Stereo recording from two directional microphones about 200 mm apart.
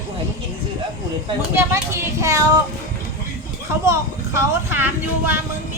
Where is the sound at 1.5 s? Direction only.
15° right (ahead or behind).